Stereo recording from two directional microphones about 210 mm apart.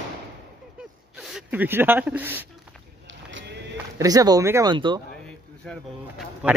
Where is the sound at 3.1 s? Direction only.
60° right (ahead or behind).